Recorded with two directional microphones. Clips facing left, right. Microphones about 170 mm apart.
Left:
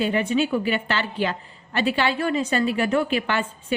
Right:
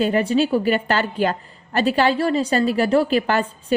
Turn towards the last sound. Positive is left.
turn(degrees=-40)  # may be behind; listen again after turning